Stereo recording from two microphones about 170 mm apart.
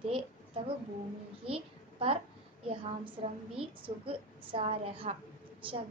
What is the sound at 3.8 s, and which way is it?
A child's voice, 30° right (ahead or behind).